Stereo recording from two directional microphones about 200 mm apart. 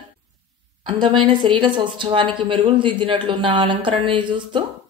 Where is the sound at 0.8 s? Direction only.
25° right (ahead or behind).